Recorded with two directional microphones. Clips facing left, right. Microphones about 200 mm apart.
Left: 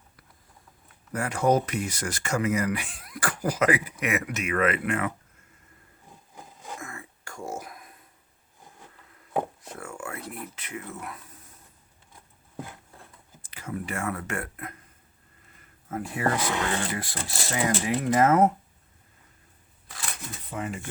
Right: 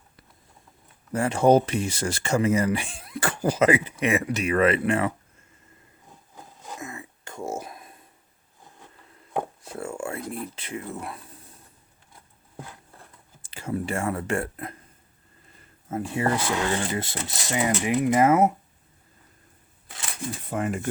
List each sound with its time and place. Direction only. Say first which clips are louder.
1.1 s speech: right 5 dB; 25° right (ahead or behind)
6.3 s roaring cats: even; 10° left (ahead or behind)
6.7 s a sound: right 6 dB; 20° right (ahead or behind)
9.7 s speech: right 7 dB; 25° right (ahead or behind)
13.4 s speech: right 5 dB; 30° right (ahead or behind); by 18.5 s 10° right (ahead or behind)
20.5 s speech: right 5 dB; 50° right (ahead or behind)